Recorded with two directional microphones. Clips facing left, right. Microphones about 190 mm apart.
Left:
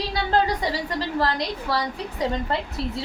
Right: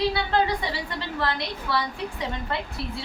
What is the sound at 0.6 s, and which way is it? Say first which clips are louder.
A woman's voice: left 5 dB; 40° left (ahead or behind).